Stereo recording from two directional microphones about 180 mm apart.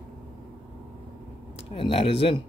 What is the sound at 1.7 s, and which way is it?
Speech, 30° left (ahead or behind).